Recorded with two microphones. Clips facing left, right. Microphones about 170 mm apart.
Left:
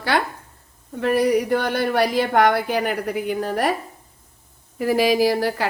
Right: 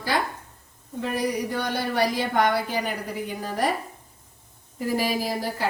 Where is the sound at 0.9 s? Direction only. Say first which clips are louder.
Left 8 dB; 65° left (ahead or behind).